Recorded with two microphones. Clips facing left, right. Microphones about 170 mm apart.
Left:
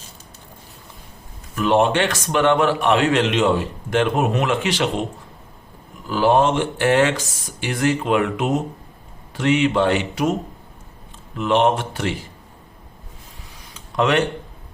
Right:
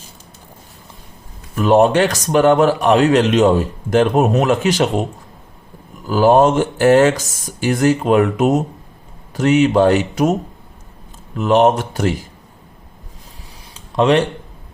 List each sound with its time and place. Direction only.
1.5 s a man's voice: 40° right (ahead or behind)
6.1 s speech: 45° right (ahead or behind)
11.3 s a man's voice: 40° right (ahead or behind)
13.9 s speech: 30° right (ahead or behind)